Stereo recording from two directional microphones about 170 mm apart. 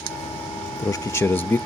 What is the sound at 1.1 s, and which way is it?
Speech, 15° left (ahead or behind).